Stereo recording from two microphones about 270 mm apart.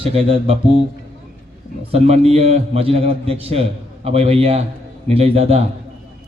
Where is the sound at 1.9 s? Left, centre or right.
Right.